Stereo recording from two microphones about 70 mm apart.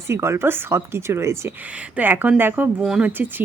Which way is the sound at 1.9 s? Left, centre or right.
Right.